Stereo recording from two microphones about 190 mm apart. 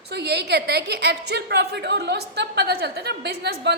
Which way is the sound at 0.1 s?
60° right (ahead or behind).